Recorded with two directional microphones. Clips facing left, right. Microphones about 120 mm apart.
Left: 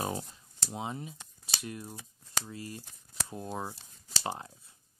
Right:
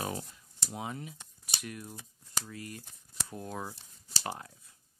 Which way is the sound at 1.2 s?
90° left.